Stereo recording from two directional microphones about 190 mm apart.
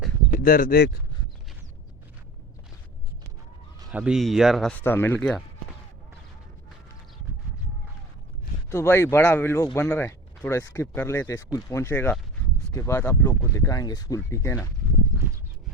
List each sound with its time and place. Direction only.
0.3 s speech: 45° left (ahead or behind)
3.9 s speech: 5° right (ahead or behind)
8.7 s speech: 15° left (ahead or behind)